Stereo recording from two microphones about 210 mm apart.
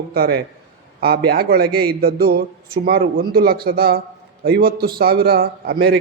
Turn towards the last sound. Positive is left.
turn(degrees=-45)  # may be behind; listen again after turning